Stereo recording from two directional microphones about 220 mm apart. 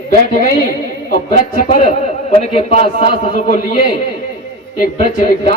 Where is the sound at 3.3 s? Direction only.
40° left (ahead or behind).